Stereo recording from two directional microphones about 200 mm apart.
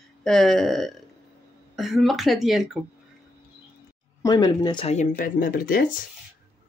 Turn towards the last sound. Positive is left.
turn(degrees=45)  # may be behind; listen again after turning